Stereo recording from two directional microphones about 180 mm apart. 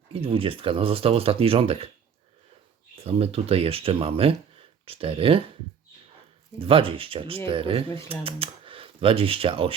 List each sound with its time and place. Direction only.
0.1 s speech: 30° right (ahead or behind)
3.0 s speech: 35° right (ahead or behind)
6.6 s speech: 30° right (ahead or behind)